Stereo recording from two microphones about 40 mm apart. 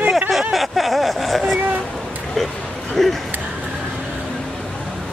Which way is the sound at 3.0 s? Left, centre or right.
Centre.